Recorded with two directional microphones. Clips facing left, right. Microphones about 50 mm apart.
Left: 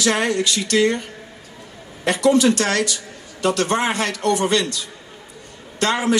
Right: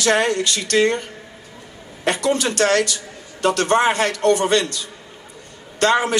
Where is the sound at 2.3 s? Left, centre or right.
Right.